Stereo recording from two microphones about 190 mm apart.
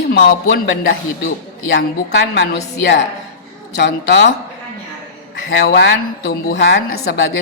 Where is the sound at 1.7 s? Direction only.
65° left (ahead or behind).